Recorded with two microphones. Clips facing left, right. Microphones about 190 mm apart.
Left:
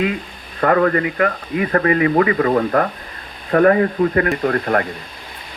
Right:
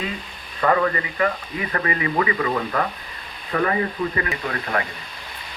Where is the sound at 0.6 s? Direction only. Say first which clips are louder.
Left 5 dB; 50° left (ahead or behind).